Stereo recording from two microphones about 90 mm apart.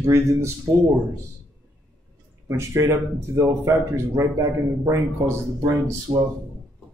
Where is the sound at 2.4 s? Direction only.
35° right (ahead or behind).